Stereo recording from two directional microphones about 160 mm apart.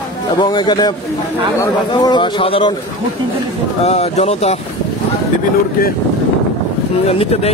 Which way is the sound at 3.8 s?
45° left (ahead or behind).